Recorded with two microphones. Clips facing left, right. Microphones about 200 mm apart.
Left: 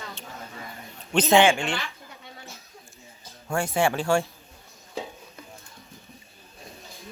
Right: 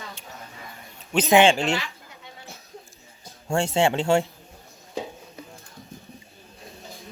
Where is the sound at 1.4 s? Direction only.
40° right (ahead or behind).